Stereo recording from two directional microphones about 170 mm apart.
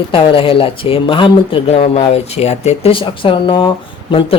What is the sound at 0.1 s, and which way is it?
Speech, 30° left (ahead or behind).